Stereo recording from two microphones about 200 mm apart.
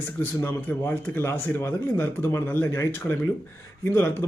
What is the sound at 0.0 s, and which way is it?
Speech, 10° left (ahead or behind).